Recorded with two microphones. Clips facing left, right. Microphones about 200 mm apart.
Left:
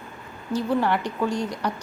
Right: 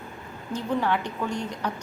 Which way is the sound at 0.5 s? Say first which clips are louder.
Left 3 dB; 10° left (ahead or behind).